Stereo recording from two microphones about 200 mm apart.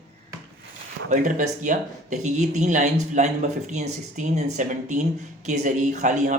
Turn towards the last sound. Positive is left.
turn(degrees=-40)  # may be behind; listen again after turning